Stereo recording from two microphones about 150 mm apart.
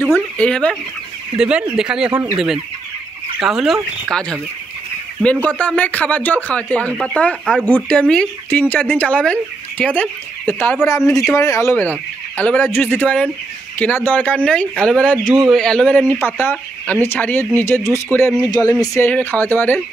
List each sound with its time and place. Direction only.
0.0 s speech: 10° left (ahead or behind)
1.3 s speech: 5° right (ahead or behind); by 19.0 s 25° left (ahead or behind)
19.0 s speech: 10° left (ahead or behind)